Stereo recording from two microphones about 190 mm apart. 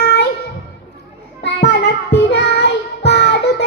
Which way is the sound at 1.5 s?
65° left (ahead or behind).